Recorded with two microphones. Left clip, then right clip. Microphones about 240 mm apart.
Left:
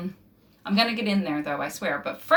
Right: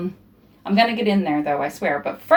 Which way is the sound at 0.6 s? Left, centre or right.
Centre.